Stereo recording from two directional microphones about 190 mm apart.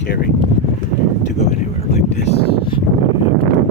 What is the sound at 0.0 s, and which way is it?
Speech, 60° left (ahead or behind).